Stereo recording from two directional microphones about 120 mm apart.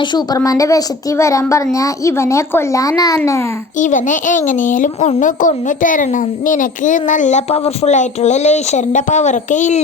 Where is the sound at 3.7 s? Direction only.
90° left.